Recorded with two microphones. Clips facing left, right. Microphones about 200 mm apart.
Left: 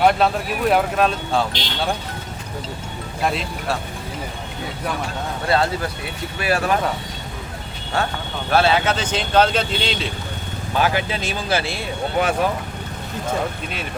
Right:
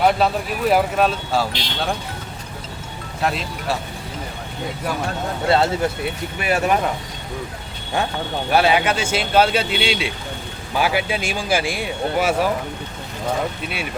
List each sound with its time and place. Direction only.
0.0 s speech: centre (ahead or behind)
3.2 s speech: centre (ahead or behind)
5.5 s speech: 25° right (ahead or behind)
8.5 s speech: 15° right (ahead or behind)